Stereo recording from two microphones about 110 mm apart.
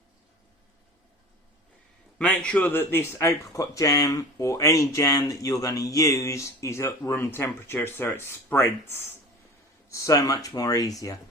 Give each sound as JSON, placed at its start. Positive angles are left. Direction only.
{"t": 2.1, "sound": "speech", "side_deg": 10}